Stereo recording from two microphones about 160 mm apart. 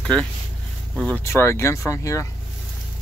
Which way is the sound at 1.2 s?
15° left (ahead or behind).